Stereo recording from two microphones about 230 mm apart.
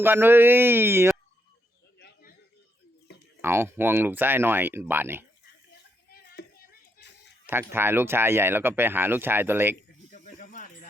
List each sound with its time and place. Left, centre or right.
0.0 s speech: centre
2.0 s a sound: left
3.4 s speech: centre
7.4 s speech: centre
10.1 s snake: left